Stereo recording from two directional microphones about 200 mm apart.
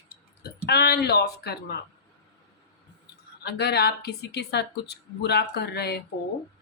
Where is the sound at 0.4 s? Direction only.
55° left (ahead or behind).